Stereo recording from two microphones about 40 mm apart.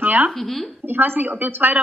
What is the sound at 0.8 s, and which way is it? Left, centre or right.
Speech, right.